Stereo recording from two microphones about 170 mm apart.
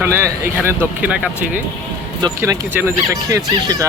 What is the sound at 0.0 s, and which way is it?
Speech, 15° right (ahead or behind).